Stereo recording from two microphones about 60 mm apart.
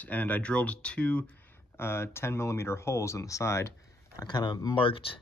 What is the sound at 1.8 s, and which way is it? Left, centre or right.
Speech, left.